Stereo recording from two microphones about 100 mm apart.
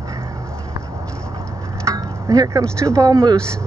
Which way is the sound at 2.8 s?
35° right (ahead or behind).